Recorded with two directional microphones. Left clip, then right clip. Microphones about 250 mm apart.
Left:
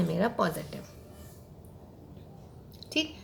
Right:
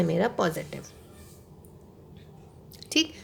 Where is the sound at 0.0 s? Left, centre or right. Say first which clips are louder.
Right 3 dB; right.